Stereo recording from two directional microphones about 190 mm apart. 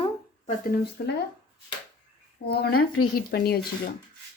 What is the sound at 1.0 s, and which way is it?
Speech, 55° left (ahead or behind).